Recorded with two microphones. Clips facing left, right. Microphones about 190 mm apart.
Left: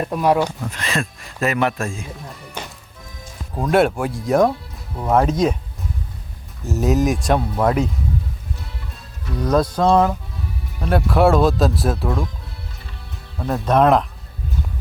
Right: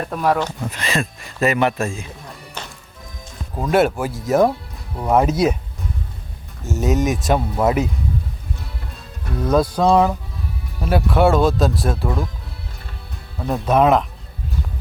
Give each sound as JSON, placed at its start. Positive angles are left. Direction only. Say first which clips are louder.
{"t": 0.0, "sound": "speech", "louder": "left 2 dB", "side_deg": 10}
{"t": 0.7, "sound": "speech", "louder": "right 1 dB", "side_deg": 0}
{"t": 2.6, "sound": "music", "louder": "left 2 dB", "side_deg": 10}
{"t": 3.6, "sound": "speech", "louder": "even", "side_deg": 0}
{"t": 6.7, "sound": "speech", "louder": "left 1 dB", "side_deg": 0}
{"t": 9.4, "sound": "speech", "louder": "right 1 dB", "side_deg": 0}
{"t": 13.4, "sound": "speech", "louder": "even", "side_deg": -5}